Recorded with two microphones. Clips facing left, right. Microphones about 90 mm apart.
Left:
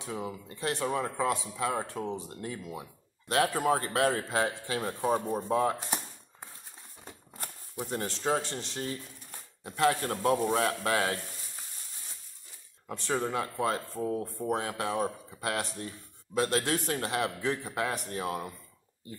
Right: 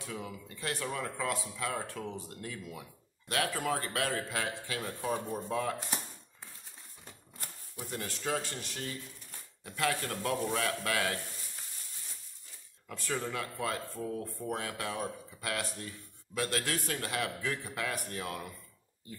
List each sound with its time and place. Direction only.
0.0 s speech: 25° left (ahead or behind)
7.8 s a man's voice: 30° left (ahead or behind)
12.8 s speech: 25° left (ahead or behind)